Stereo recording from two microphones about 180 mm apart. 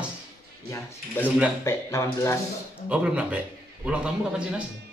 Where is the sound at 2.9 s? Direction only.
5° right (ahead or behind).